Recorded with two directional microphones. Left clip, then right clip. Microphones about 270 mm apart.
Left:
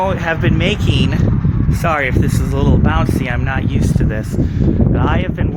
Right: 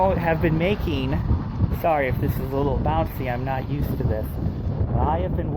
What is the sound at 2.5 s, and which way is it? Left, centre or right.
Speech, left.